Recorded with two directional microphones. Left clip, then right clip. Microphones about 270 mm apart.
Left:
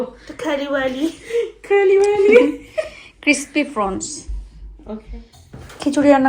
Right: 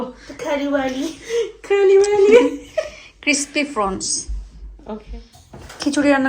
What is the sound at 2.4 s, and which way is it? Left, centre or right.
A woman's voice, centre.